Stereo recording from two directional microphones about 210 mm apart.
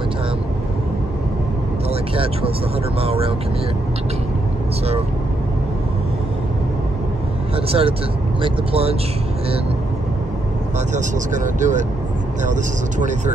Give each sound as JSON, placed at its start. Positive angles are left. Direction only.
{"t": 1.9, "sound": "vehicle", "side_deg": -25}
{"t": 3.0, "sound": "speech", "side_deg": -25}
{"t": 7.5, "sound": "speech", "side_deg": -25}
{"t": 10.9, "sound": "speech", "side_deg": -35}